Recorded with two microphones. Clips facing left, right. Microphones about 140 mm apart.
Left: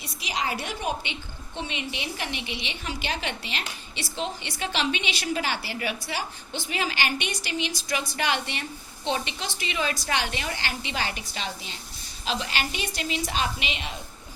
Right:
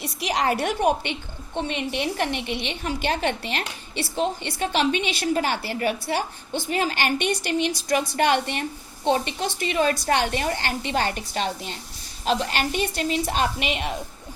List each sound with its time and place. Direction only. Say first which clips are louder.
0.0 s a woman's voice: right 7 dB; 65° right (ahead or behind)